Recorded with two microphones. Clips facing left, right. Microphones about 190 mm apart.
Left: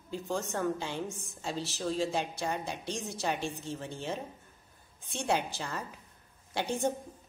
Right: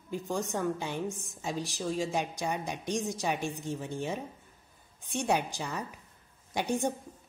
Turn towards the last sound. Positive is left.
turn(degrees=-15)  # may be behind; listen again after turning